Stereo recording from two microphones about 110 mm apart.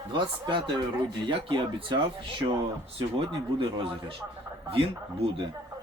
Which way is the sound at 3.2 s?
55° right (ahead or behind).